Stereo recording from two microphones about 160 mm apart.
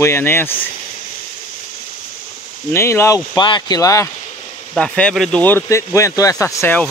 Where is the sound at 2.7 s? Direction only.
15° left (ahead or behind).